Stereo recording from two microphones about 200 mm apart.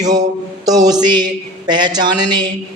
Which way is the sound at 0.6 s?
20° right (ahead or behind).